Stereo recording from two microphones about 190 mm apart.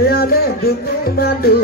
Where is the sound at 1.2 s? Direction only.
55° left (ahead or behind).